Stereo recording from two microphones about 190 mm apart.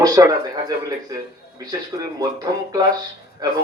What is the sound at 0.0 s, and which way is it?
A man's voice, 20° right (ahead or behind).